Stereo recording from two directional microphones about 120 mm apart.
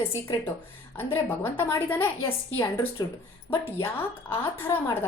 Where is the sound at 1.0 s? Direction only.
15° left (ahead or behind).